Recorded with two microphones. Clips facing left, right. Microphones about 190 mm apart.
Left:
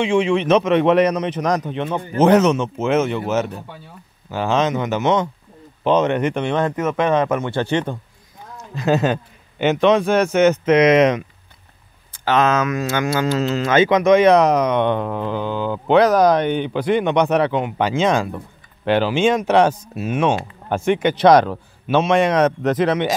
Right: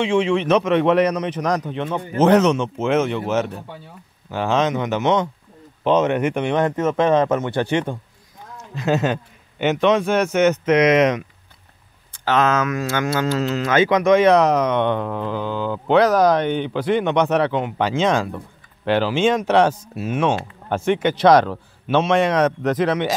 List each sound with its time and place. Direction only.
0.0 s speech: 15° left (ahead or behind); by 6.7 s 15° right (ahead or behind)
6.7 s speech: 30° right (ahead or behind); by 8.0 s 10° right (ahead or behind)
8.5 s a man's voice: 40° left (ahead or behind)
12.1 s speech: 15° left (ahead or behind)
13.4 s a man's voice: 25° left (ahead or behind)